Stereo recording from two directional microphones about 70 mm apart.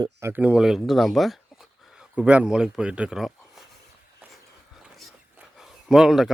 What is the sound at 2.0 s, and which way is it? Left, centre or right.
Speech, centre.